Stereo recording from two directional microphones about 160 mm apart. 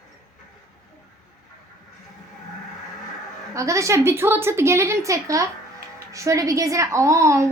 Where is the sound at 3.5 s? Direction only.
20° right (ahead or behind).